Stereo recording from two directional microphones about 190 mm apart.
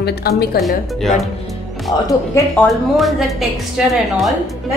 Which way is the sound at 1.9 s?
20° left (ahead or behind).